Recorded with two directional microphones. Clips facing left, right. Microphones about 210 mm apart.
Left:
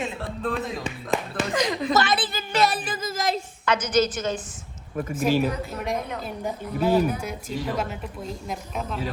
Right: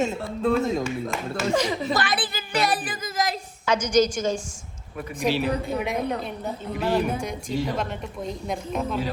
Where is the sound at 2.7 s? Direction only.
25° left (ahead or behind).